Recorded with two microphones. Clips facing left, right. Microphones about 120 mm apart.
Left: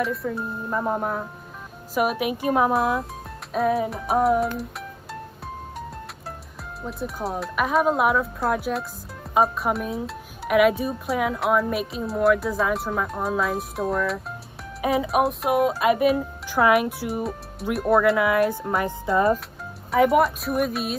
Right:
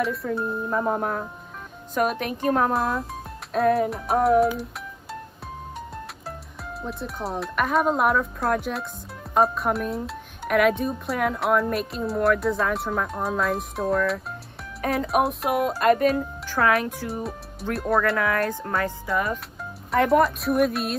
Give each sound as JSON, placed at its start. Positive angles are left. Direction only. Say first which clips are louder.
{"t": 0.0, "sound": "speech", "louder": "right 1 dB", "side_deg": 0}
{"t": 6.8, "sound": "speech", "louder": "left 2 dB", "side_deg": 0}
{"t": 17.1, "sound": "speech", "louder": "left 3 dB", "side_deg": 0}
{"t": 19.0, "sound": "speech", "louder": "left 9 dB", "side_deg": 30}
{"t": 19.9, "sound": "speech", "louder": "left 1 dB", "side_deg": 5}